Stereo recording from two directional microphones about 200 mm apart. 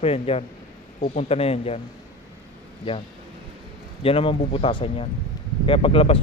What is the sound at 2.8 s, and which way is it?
Speech, 25° left (ahead or behind).